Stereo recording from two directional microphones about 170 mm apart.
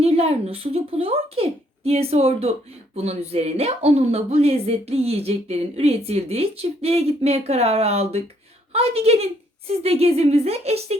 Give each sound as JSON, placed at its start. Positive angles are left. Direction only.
{"t": 0.0, "sound": "speech", "side_deg": -35}